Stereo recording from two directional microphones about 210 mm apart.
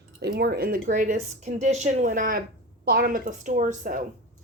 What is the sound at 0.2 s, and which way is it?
Speech, 50° right (ahead or behind).